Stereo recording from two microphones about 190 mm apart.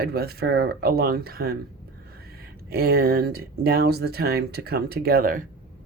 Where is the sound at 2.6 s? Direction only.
55° right (ahead or behind).